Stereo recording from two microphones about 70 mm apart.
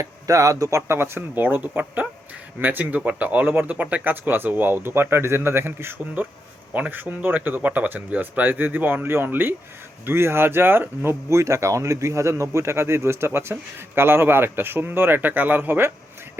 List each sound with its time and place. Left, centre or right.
0.0 s speech: right
0.8 s speech: right